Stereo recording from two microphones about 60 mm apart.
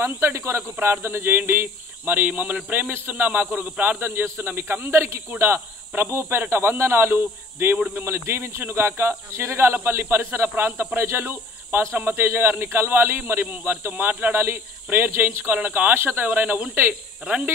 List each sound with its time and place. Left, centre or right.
0.0 s speech: right
4.0 s a man's voice: right
12.0 s a man's voice: right
16.3 s speech: right